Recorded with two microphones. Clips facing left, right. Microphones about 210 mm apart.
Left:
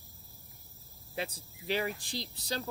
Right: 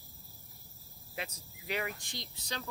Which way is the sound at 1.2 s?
30° left (ahead or behind).